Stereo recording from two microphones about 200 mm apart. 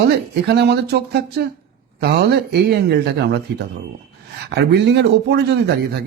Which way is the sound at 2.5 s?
55° right (ahead or behind).